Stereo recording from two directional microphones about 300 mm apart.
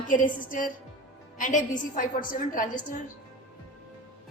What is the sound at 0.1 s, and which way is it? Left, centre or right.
A woman's voice, left.